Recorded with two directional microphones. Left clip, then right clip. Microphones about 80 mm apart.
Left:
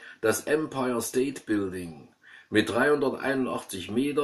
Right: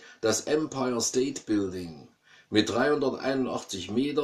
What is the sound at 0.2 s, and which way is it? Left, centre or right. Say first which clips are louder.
Speech: left 1 dB; right.